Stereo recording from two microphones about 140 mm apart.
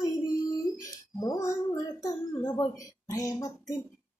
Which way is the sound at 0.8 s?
25° left (ahead or behind).